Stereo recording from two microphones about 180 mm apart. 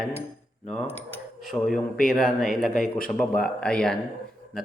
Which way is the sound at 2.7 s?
45° left (ahead or behind).